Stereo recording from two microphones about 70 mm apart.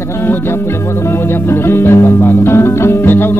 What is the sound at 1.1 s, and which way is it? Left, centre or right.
Music, left.